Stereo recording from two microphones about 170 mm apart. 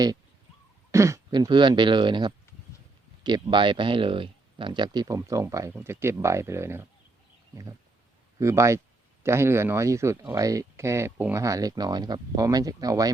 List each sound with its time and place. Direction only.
0.9 s speech: 15° right (ahead or behind)